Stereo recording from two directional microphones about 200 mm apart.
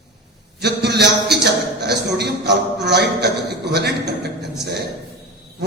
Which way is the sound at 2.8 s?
55° right (ahead or behind).